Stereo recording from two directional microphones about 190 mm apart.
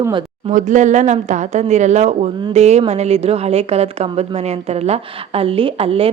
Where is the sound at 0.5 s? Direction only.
40° right (ahead or behind).